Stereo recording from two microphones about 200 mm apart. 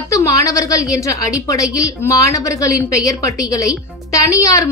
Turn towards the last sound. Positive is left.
turn(degrees=15)  # may be behind; listen again after turning